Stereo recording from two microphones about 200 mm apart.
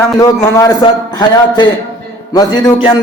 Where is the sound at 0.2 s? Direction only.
15° left (ahead or behind).